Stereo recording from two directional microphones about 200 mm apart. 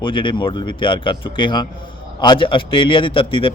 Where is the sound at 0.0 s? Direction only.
25° left (ahead or behind).